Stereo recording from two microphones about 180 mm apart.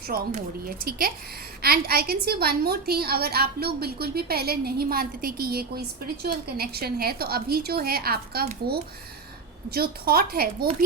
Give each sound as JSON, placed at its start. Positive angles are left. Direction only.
{"t": 0.1, "sound": "a woman's voice", "side_deg": -55}
{"t": 9.6, "sound": "a woman's voice", "side_deg": -60}